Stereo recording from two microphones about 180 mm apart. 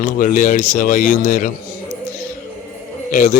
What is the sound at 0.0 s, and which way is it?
A man's voice, 50° left (ahead or behind).